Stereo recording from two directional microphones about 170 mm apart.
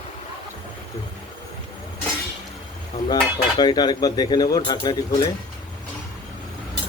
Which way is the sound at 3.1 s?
25° left (ahead or behind).